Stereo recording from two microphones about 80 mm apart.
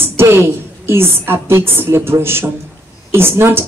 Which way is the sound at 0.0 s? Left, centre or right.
Right.